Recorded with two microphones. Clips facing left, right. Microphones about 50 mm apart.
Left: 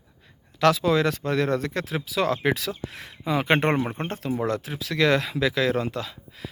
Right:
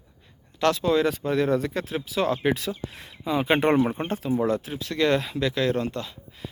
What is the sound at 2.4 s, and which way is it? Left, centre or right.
Speech, left.